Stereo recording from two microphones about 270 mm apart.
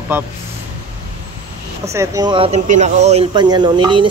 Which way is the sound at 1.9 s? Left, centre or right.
Centre.